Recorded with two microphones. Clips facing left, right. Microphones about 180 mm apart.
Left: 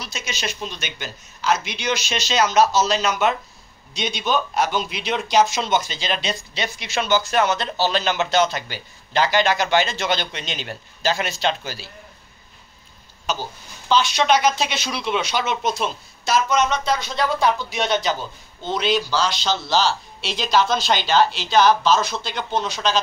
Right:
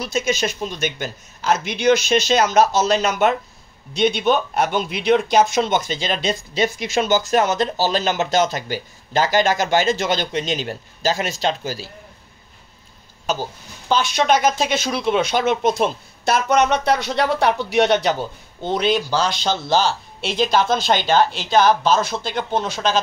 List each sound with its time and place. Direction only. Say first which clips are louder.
0.0 s speech: right 9 dB; 50° right (ahead or behind)
13.8 s speech: even; 50° right (ahead or behind)